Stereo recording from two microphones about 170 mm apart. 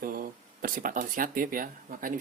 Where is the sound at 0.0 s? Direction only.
55° right (ahead or behind).